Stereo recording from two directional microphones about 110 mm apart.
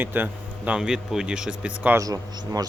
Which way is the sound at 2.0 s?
30° right (ahead or behind).